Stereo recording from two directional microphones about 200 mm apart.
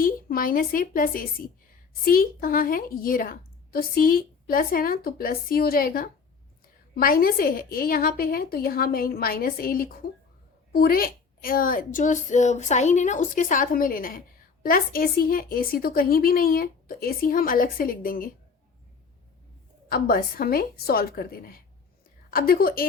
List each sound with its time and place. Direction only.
0.0 s a woman's voice: 45° left (ahead or behind)
19.9 s a woman's voice: 45° left (ahead or behind)